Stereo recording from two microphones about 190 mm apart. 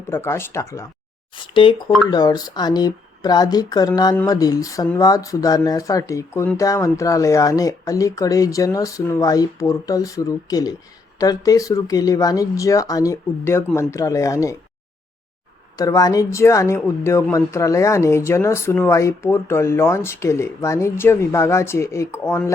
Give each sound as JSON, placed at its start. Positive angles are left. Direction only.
{"t": 0.1, "sound": "speech", "side_deg": 15}
{"t": 1.4, "sound": "speech", "side_deg": 25}
{"t": 15.8, "sound": "speech", "side_deg": 20}